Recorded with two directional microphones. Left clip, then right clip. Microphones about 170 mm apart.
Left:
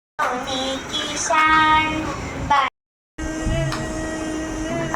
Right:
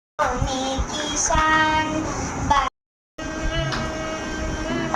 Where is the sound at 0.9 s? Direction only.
25° left (ahead or behind).